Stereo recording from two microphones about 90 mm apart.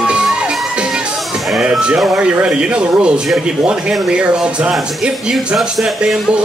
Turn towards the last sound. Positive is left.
turn(degrees=-5)  # may be behind; listen again after turning